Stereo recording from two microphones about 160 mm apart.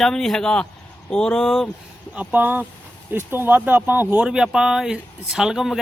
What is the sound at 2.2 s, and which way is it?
Speech, 10° right (ahead or behind).